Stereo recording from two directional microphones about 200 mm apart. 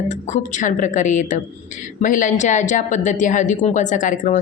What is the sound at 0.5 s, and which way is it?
A woman's voice, 40° left (ahead or behind).